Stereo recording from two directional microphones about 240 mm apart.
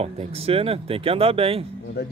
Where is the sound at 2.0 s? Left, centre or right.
Left.